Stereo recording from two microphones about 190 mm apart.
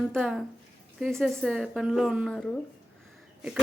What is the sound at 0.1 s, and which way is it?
A woman's voice, centre (ahead or behind).